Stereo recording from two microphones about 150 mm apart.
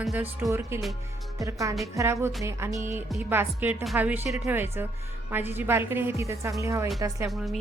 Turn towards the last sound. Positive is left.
turn(degrees=0)  # may be behind; listen again after turning